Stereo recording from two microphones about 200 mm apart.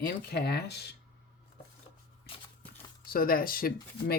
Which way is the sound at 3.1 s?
45° left (ahead or behind).